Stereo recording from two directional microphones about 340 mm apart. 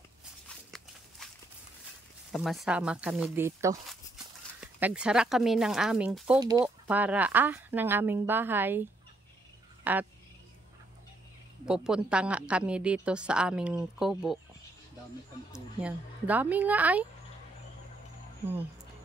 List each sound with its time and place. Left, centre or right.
0.2 s walk: centre
2.3 s speech: centre
9.9 s speech: centre
11.6 s speech: centre
15.5 s speech: centre